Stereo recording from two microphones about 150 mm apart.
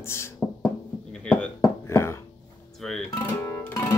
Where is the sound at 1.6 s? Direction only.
20° left (ahead or behind).